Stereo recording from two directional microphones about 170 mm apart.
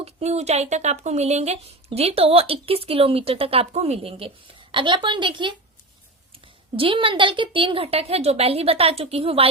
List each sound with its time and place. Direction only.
0.0 s speech: 40° right (ahead or behind)
6.7 s speech: 30° right (ahead or behind)